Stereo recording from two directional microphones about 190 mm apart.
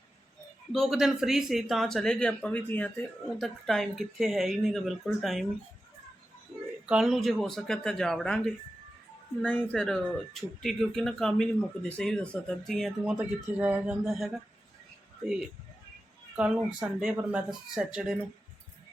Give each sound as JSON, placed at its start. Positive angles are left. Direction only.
{"t": 0.7, "sound": "speech", "side_deg": 0}
{"t": 6.8, "sound": "speech", "side_deg": -5}